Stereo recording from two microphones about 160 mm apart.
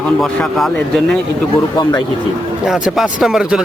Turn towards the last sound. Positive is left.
turn(degrees=-5)  # may be behind; listen again after turning